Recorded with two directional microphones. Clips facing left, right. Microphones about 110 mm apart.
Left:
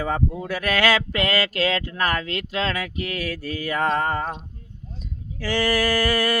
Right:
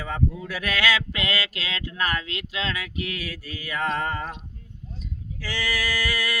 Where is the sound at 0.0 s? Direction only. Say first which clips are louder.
Left 4 dB; 40° left (ahead or behind).